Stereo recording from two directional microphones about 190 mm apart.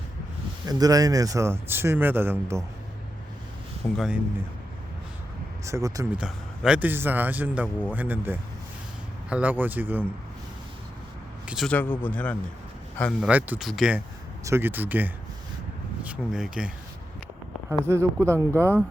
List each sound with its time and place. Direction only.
0.6 s a man's voice: 20° right (ahead or behind)
3.9 s speech: centre (ahead or behind)
5.6 s a man's voice: 15° right (ahead or behind)
6.1 s a man's voice: 5° right (ahead or behind)
11.4 s speech: centre (ahead or behind)
13.1 s a man's voice: 5° right (ahead or behind)